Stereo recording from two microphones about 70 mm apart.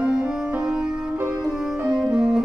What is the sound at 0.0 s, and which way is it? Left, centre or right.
Music, centre.